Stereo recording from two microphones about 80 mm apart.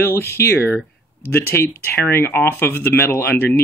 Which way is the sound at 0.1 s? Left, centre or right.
Left.